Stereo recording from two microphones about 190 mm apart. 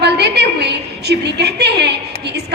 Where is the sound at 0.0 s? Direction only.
60° right (ahead or behind).